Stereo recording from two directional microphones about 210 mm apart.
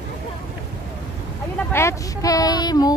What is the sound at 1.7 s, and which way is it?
Speech, 10° left (ahead or behind).